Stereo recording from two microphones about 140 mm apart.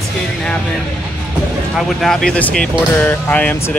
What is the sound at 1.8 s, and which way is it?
Speech, centre (ahead or behind).